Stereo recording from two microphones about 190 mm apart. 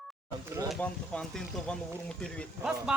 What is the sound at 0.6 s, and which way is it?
Speech, 5° left (ahead or behind).